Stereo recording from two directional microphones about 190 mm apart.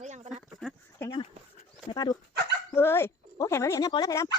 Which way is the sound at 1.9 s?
20° left (ahead or behind).